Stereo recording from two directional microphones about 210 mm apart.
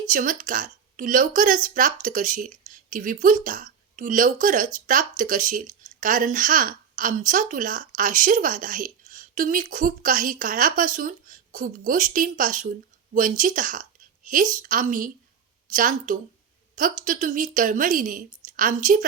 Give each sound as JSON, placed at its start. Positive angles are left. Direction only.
{"t": 0.1, "sound": "speech", "side_deg": -40}